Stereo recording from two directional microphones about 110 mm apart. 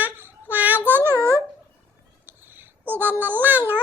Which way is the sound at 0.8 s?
20° right (ahead or behind).